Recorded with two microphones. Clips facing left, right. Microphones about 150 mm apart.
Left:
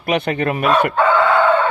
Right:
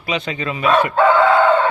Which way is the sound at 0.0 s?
60° left (ahead or behind).